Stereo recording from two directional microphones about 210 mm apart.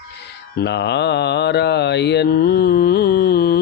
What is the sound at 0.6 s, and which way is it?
Mantra, 50° left (ahead or behind).